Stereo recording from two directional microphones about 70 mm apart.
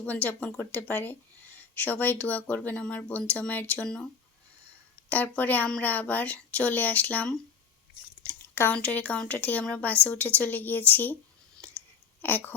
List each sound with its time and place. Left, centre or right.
0.0 s speech: left
3.8 s speech: centre
5.0 s speech: left
8.7 s speech: centre
12.2 s speech: left